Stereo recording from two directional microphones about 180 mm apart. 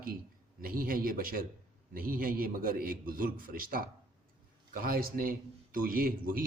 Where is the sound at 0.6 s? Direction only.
55° right (ahead or behind).